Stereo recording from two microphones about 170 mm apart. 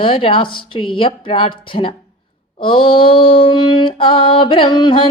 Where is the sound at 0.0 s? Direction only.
30° left (ahead or behind).